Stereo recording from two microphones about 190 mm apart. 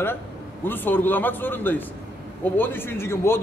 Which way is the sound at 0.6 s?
10° left (ahead or behind).